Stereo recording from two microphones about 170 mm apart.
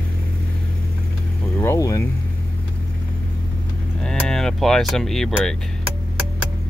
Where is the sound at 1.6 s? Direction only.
15° left (ahead or behind).